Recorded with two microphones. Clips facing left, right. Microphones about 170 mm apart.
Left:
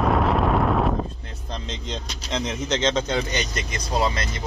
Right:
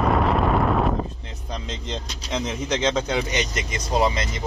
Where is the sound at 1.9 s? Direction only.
5° right (ahead or behind).